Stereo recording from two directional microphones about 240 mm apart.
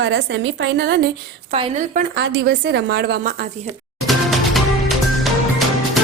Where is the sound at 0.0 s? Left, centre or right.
Right.